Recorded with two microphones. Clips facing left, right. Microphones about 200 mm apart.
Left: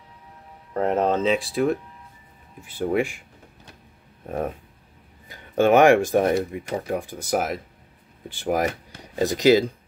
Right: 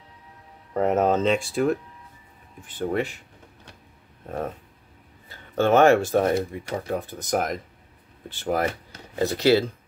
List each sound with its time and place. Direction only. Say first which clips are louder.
0.7 s speech: right 1 dB; 5° right (ahead or behind)
4.3 s speech: left 3 dB; 10° left (ahead or behind)